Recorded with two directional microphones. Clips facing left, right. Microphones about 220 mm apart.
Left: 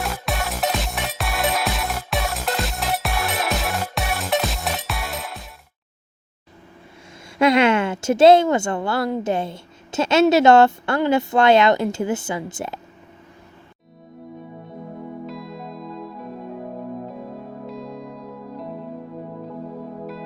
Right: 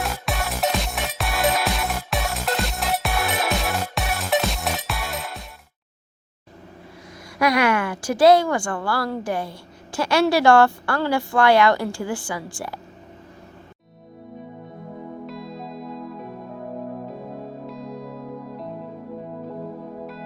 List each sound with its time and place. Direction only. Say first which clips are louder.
0.0 s music: left 1 dB; centre (ahead or behind)
7.3 s speech: left 4 dB; 25° left (ahead or behind)
15.3 s music: even; centre (ahead or behind)
17.7 s music: left 1 dB; centre (ahead or behind)